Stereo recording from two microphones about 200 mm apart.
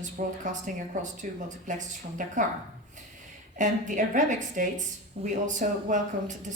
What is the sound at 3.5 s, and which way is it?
A woman's voice, 40° right (ahead or behind).